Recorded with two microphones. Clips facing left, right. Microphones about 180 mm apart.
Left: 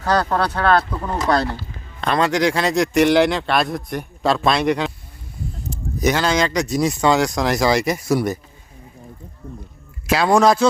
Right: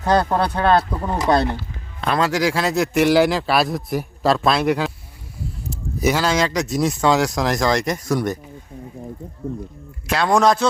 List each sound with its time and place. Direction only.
0.0 s speech: 20° right (ahead or behind)
2.0 s speech: 5° right (ahead or behind)
10.1 s speech: 5° left (ahead or behind)